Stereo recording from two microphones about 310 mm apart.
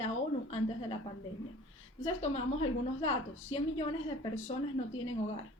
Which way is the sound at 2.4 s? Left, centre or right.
Left.